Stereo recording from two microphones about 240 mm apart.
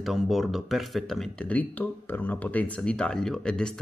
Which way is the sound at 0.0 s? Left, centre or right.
Centre.